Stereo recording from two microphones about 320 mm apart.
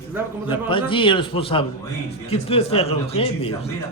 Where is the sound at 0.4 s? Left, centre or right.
Centre.